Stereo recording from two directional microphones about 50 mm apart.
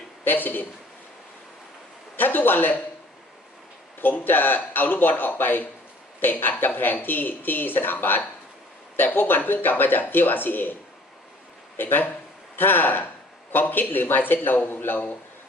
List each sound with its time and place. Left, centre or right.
0.3 s a man's voice: left
2.1 s speech: left
4.0 s a man's voice: left
11.8 s a man's voice: left